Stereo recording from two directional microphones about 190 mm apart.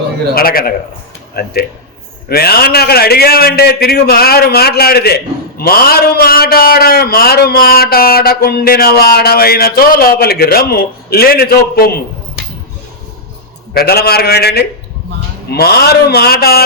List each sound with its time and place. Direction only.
0.3 s a man's voice: 50° left (ahead or behind)
13.7 s a man's voice: 55° left (ahead or behind)